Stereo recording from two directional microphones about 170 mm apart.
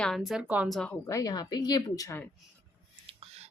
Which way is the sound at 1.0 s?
20° left (ahead or behind).